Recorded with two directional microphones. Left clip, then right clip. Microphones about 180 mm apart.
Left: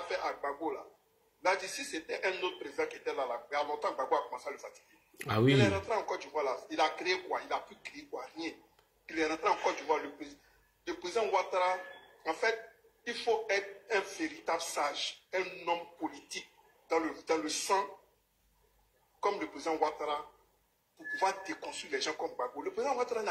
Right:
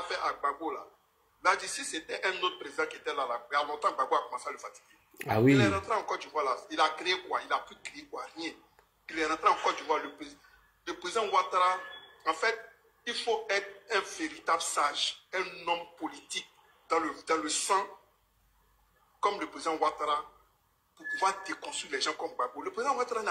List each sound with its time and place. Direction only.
0.0 s speech: 10° left (ahead or behind)
19.2 s speech: 10° left (ahead or behind)